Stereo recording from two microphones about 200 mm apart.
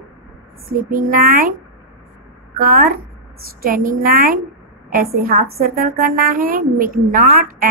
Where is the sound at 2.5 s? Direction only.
45° right (ahead or behind).